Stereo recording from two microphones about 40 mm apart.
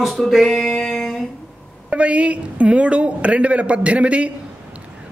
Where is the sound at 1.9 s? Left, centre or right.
Right.